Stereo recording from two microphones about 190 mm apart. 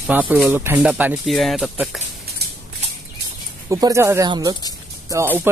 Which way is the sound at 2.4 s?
55° right (ahead or behind).